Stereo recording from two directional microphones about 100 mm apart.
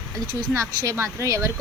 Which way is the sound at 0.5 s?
30° right (ahead or behind).